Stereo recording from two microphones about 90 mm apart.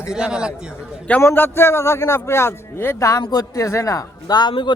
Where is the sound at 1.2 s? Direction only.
25° left (ahead or behind).